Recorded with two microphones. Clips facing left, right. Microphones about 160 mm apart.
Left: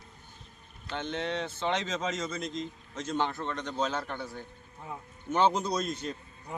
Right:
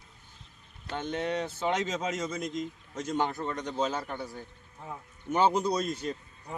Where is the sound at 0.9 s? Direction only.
10° right (ahead or behind).